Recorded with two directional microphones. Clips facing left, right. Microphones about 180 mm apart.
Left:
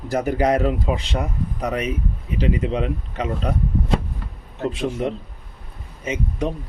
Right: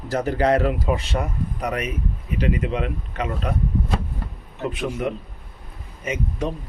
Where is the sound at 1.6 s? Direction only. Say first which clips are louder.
Left 3 dB; 30° left (ahead or behind).